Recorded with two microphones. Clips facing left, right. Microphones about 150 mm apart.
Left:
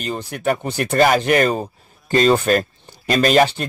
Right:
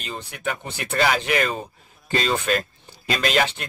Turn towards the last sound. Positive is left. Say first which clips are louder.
# left 8 dB
turn(degrees=40)  # may be behind; listen again after turning